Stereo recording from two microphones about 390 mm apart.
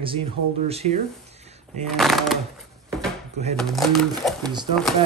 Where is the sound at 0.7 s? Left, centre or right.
Centre.